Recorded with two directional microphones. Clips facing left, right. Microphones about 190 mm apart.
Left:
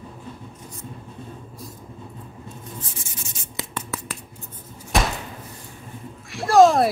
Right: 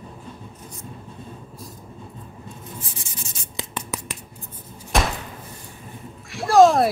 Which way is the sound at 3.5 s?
20° right (ahead or behind).